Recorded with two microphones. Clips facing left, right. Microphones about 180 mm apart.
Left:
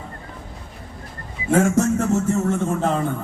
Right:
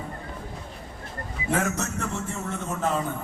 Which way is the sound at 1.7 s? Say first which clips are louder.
Left 12 dB; 45° left (ahead or behind).